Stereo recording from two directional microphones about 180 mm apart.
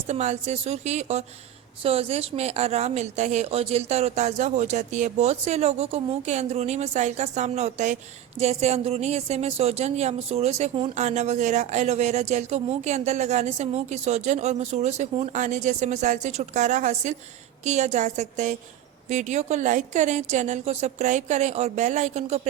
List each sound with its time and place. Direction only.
0.1 s a woman's voice: 40° right (ahead or behind)